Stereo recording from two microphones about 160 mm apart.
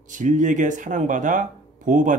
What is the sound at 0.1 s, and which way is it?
Speech, 50° right (ahead or behind).